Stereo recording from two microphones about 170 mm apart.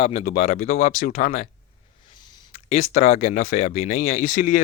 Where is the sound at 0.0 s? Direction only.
40° left (ahead or behind).